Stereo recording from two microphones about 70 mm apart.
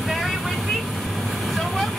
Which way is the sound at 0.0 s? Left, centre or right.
Centre.